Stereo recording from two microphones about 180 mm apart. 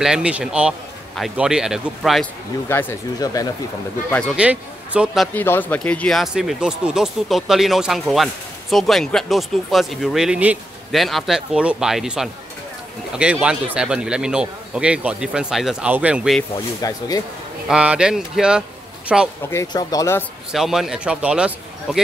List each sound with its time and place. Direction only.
0.0 s speech: 5° right (ahead or behind)
2.7 s speech: 15° left (ahead or behind)
4.1 s speech: 5° left (ahead or behind)
4.4 s a man's voice: 5° right (ahead or behind)
5.3 s speech: 10° left (ahead or behind); by 16.3 s 5° right (ahead or behind)
16.8 s speech: 20° left (ahead or behind)
17.6 s speech: 5° right (ahead or behind)
19.5 s speech: 20° left (ahead or behind)
20.5 s speech: centre (ahead or behind)